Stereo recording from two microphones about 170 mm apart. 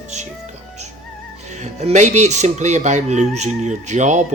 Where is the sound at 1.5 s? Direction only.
40° right (ahead or behind).